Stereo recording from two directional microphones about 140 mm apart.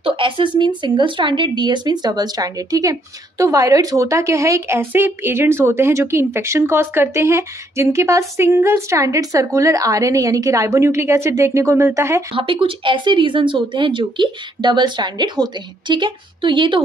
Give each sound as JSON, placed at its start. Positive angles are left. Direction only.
{"t": 0.0, "sound": "a woman's voice", "side_deg": -40}
{"t": 12.4, "sound": "speech", "side_deg": -40}